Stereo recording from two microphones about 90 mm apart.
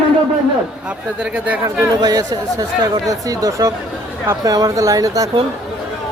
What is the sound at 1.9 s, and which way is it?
Speech, 45° right (ahead or behind).